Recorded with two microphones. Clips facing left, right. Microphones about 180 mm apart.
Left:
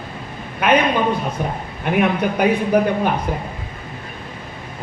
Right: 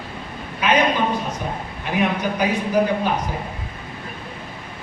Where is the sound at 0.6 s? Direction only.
60° left (ahead or behind).